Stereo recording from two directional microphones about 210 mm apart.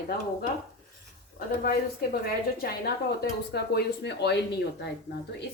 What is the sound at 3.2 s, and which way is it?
A woman's voice, 50° left (ahead or behind).